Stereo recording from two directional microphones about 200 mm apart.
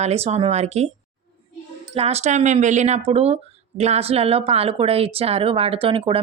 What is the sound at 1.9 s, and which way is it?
Speech, 30° right (ahead or behind).